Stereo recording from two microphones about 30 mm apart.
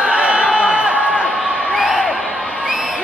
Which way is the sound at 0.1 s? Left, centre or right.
Right.